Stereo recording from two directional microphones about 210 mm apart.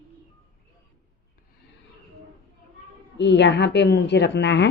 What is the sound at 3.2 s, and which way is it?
Speech, 55° left (ahead or behind).